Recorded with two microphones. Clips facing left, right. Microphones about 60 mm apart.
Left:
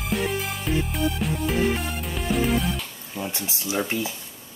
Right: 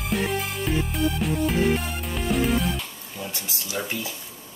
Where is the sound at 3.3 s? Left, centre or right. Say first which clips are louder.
Left 4 dB; left.